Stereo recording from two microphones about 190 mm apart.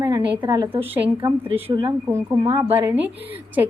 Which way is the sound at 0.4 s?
20° right (ahead or behind).